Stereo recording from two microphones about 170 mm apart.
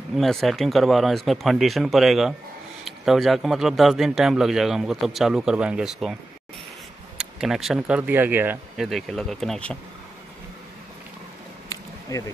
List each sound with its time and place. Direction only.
0.1 s speech: centre (ahead or behind)
7.2 s speech: 5° right (ahead or behind)
8.8 s speech: centre (ahead or behind)
12.1 s speech: 20° left (ahead or behind)